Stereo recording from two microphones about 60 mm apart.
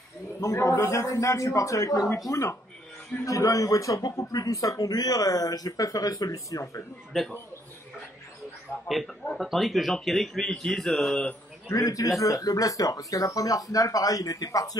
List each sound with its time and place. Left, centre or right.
0.4 s a man's voice: left
7.1 s speech: centre
8.8 s speech: centre
11.7 s speech: left